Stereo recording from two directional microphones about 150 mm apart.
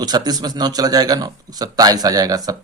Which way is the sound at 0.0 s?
25° right (ahead or behind).